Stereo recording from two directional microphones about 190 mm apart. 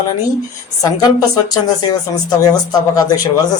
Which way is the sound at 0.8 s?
20° left (ahead or behind).